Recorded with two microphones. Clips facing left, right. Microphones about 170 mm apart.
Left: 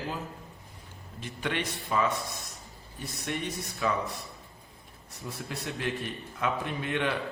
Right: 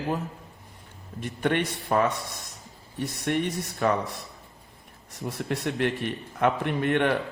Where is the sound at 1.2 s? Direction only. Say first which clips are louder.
Right 7 dB; 55° right (ahead or behind).